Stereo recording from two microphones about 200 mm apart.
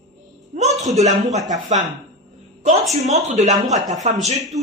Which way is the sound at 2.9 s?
35° right (ahead or behind).